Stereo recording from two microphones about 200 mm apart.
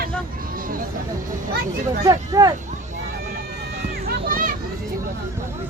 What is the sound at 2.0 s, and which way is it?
Speech, 20° right (ahead or behind).